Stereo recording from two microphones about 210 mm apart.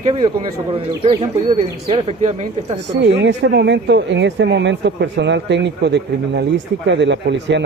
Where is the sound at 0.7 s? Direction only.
25° right (ahead or behind).